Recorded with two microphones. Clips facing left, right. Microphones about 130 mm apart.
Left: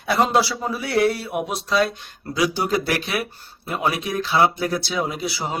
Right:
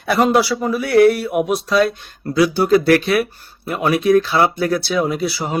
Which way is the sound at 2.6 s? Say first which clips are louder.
Right 10 dB; 15° left (ahead or behind).